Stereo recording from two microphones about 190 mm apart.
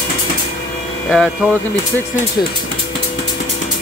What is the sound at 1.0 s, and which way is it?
Speech, centre (ahead or behind).